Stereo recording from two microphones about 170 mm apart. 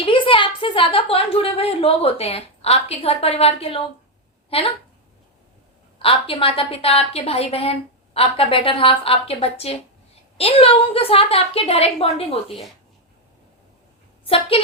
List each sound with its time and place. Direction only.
0.0 s a woman's voice: 30° left (ahead or behind)
6.0 s a woman's voice: 30° left (ahead or behind)
12.5 s speech: centre (ahead or behind)
14.3 s a woman's voice: 30° left (ahead or behind)